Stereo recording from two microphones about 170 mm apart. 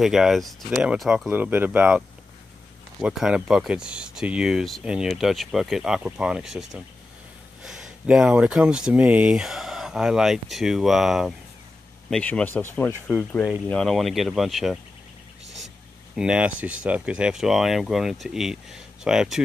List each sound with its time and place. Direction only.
0.0 s speech: centre (ahead or behind)
15.4 s vehicle: 90° right
16.2 s speech: 5° right (ahead or behind)